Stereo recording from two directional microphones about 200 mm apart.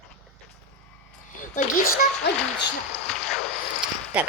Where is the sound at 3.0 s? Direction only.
5° left (ahead or behind).